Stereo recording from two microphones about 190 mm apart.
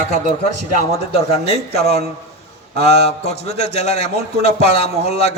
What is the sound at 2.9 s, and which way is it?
A man's voice, 35° left (ahead or behind).